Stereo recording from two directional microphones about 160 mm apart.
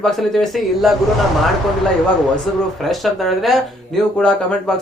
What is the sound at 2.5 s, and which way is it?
Speech, centre (ahead or behind).